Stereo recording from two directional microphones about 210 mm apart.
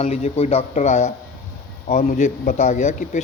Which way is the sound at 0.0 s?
30° left (ahead or behind).